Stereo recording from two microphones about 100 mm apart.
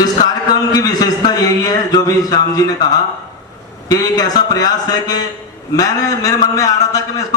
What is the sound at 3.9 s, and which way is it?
A man's voice, 40° left (ahead or behind).